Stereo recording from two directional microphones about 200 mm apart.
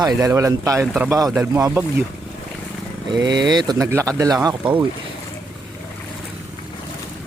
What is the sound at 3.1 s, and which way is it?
Speech, 20° right (ahead or behind).